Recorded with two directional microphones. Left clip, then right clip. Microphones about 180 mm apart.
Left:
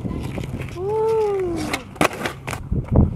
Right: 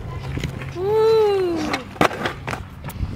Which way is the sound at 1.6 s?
10° left (ahead or behind).